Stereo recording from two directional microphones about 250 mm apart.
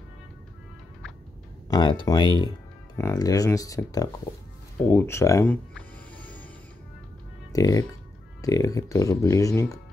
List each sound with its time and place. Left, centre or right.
1.7 s speech: centre
6.1 s music: centre
7.5 s speech: centre